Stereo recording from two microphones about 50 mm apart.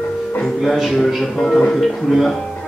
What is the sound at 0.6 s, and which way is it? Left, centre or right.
Speech, centre.